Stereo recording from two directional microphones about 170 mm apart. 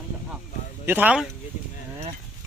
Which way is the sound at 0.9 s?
10° right (ahead or behind).